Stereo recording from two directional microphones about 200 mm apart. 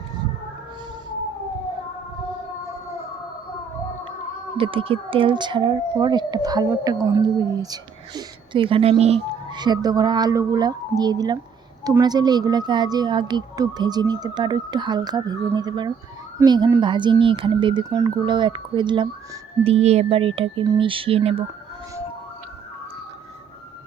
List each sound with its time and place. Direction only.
4.5 s speech: 25° right (ahead or behind)